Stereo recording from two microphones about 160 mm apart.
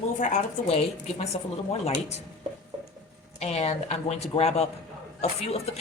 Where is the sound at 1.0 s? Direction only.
40° left (ahead or behind).